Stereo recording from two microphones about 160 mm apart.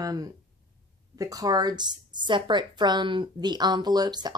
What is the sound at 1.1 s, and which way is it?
A woman's voice, 20° right (ahead or behind).